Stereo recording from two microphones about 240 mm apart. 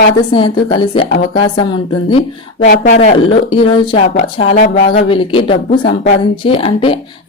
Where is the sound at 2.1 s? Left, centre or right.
Left.